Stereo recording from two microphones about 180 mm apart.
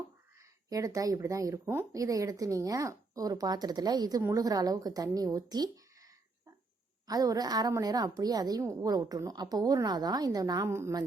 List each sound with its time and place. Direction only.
0.3 s speech: 20° right (ahead or behind)
7.1 s speech: 20° right (ahead or behind)